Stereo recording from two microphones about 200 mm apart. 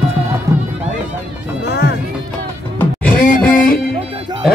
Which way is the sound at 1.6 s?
55° left (ahead or behind).